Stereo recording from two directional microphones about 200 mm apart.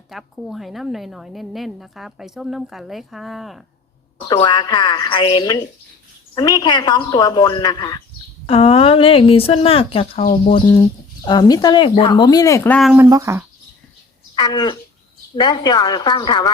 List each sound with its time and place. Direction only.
0.1 s a woman's voice: centre (ahead or behind)
4.3 s speech: 20° left (ahead or behind)
10.2 s speech: 45° left (ahead or behind)
11.2 s speech: 20° left (ahead or behind)
13.1 s speech: 15° right (ahead or behind)
14.3 s speech: 20° left (ahead or behind)